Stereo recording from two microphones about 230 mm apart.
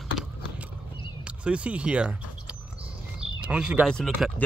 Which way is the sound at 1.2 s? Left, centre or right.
Centre.